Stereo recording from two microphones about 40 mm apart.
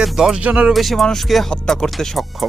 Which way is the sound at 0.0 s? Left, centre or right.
Centre.